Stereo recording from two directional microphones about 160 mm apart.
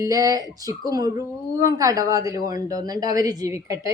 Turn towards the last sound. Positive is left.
turn(degrees=-20)  # may be behind; listen again after turning